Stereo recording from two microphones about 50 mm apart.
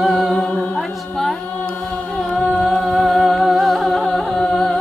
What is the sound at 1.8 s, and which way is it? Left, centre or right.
Music, centre.